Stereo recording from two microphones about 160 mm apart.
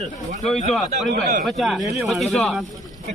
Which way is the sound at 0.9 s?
45° right (ahead or behind).